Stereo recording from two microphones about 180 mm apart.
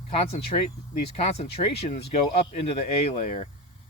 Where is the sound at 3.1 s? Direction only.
40° left (ahead or behind).